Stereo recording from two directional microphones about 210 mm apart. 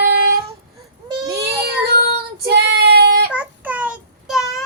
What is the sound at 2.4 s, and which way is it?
Child singing, 50° right (ahead or behind).